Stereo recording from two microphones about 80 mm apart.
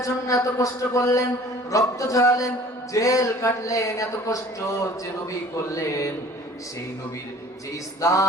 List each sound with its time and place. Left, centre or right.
0.0 s a man's voice: left
8.0 s speech: left